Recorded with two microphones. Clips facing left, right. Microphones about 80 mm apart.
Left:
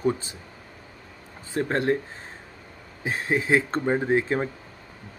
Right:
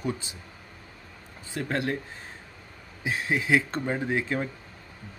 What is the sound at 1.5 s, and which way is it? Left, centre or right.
Speech, left.